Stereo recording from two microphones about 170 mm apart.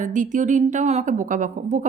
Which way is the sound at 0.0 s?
50° right (ahead or behind).